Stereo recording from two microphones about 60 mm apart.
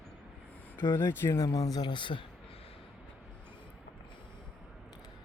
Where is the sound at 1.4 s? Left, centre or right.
Left.